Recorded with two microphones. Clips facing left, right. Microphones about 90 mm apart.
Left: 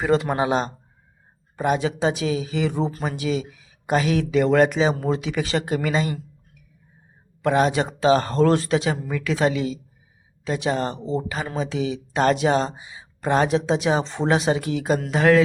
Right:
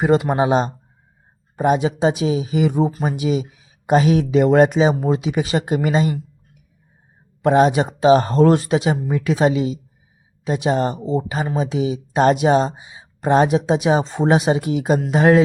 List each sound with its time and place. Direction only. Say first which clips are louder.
0.0 s speech: right 4 dB; 20° right (ahead or behind)
7.4 s speech: right 5 dB; 20° right (ahead or behind)